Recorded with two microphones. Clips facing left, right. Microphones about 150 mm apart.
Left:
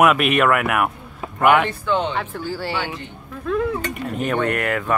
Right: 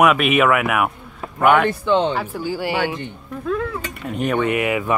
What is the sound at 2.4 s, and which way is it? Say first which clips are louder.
Speech: right 3 dB; 15° right (ahead or behind).